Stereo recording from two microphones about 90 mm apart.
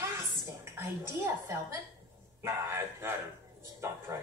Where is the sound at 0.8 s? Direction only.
35° right (ahead or behind).